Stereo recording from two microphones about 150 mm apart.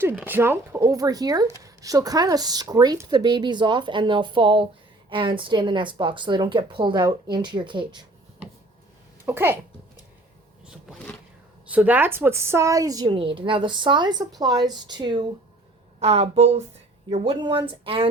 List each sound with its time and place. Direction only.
0.3 s speech: 15° right (ahead or behind); by 8.0 s 30° right (ahead or behind)
9.2 s a woman's voice: 15° right (ahead or behind)
11.7 s a woman's voice: 10° right (ahead or behind); by 15.2 s 30° right (ahead or behind)
16.0 s speech: 40° right (ahead or behind)